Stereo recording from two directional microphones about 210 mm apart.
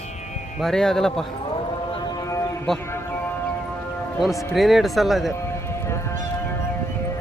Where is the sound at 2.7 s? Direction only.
Centre (ahead or behind).